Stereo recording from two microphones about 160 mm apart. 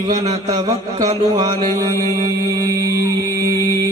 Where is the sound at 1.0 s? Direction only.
45° right (ahead or behind).